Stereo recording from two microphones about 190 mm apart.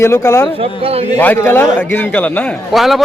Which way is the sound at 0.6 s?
30° right (ahead or behind).